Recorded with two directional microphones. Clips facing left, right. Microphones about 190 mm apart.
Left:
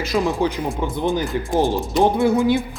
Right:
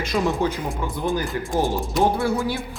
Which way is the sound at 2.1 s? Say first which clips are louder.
Left 6 dB; 20° left (ahead or behind).